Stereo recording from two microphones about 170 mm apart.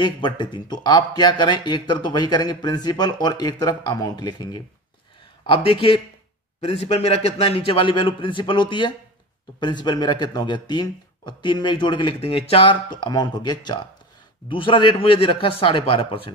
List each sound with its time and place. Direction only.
0.0 s a man's voice: 25° left (ahead or behind)